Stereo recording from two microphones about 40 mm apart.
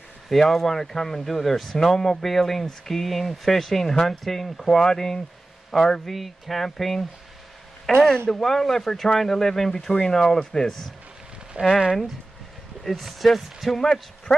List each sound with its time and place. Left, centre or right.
0.3 s speech: centre
7.9 s a sound: centre
8.3 s speech: centre
11.6 s speech: right
12.8 s speech: centre